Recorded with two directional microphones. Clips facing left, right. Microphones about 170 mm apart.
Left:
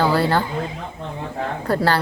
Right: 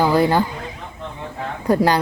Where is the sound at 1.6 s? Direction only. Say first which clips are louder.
Right 4 dB; 15° right (ahead or behind).